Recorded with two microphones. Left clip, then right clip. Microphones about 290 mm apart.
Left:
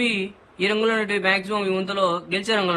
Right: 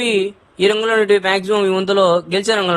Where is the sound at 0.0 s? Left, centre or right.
Centre.